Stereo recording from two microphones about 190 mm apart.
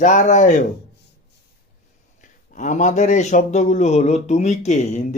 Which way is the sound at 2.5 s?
40° left (ahead or behind).